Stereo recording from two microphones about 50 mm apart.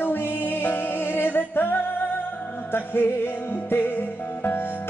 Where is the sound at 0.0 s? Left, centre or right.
Left.